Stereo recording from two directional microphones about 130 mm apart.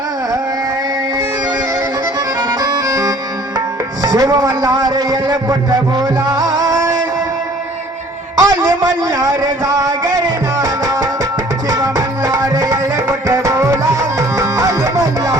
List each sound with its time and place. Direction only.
2.6 s music: 30° right (ahead or behind)
8.4 s a sound: 30° right (ahead or behind)
11.7 s music: 25° right (ahead or behind)